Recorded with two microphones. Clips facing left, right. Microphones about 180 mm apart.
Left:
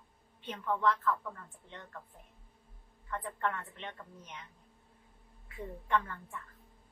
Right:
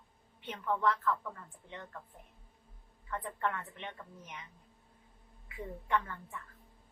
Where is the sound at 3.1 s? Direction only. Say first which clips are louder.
Even; 10° right (ahead or behind).